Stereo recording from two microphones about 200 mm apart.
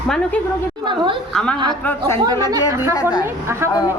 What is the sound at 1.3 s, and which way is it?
A woman's voice, 5° left (ahead or behind).